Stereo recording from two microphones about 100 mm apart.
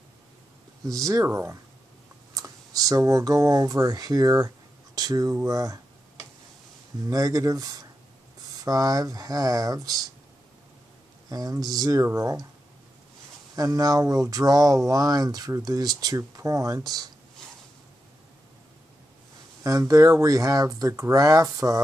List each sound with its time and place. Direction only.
0.8 s speech: 35° right (ahead or behind)
4.9 s a sound: 40° right (ahead or behind)
7.1 s speech: 40° right (ahead or behind)
11.2 s speech: 40° right (ahead or behind)
13.6 s speech: 40° right (ahead or behind)
19.6 s speech: 35° right (ahead or behind)